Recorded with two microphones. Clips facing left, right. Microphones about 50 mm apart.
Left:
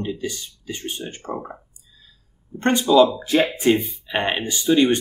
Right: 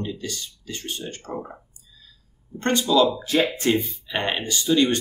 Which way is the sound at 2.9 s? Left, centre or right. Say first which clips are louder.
Left 5 dB; left.